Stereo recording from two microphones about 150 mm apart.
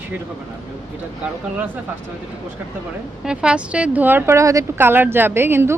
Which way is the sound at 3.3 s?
5° right (ahead or behind).